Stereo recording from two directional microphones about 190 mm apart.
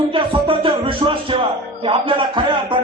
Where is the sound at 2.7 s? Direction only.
25° right (ahead or behind).